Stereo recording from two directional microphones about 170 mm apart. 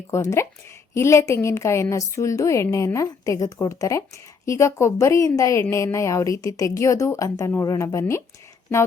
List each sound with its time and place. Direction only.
0.1 s a woman's voice: 15° left (ahead or behind)